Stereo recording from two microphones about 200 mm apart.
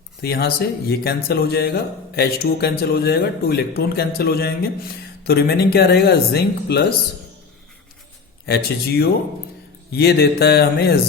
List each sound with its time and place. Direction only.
0.2 s a man's voice: 50° left (ahead or behind)
8.4 s a man's voice: 50° left (ahead or behind)